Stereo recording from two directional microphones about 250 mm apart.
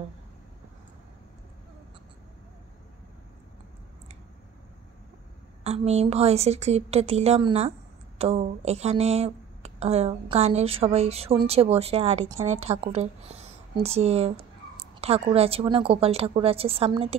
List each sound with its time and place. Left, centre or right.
5.6 s speech: right